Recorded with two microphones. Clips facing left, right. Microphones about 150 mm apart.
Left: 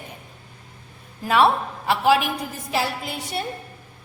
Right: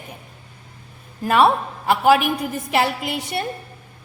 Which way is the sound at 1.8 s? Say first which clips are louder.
Right 3 dB; 50° right (ahead or behind).